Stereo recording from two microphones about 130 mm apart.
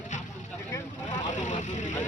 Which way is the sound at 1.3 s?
70° left (ahead or behind).